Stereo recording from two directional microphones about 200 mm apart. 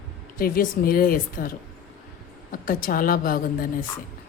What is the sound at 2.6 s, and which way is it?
Speech, 45° left (ahead or behind).